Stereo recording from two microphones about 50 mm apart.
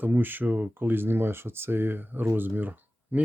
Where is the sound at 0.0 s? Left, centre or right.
Right.